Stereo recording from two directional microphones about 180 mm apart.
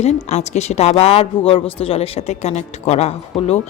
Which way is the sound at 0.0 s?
40° left (ahead or behind).